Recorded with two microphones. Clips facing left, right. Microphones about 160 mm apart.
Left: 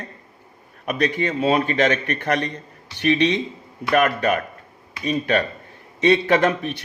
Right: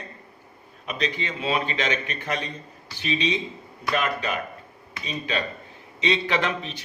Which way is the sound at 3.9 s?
55° left (ahead or behind).